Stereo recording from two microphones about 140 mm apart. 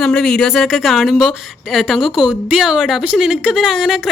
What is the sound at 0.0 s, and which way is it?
A woman's voice, 5° left (ahead or behind).